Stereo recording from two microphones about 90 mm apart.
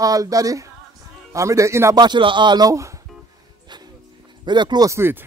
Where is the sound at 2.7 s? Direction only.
35° right (ahead or behind).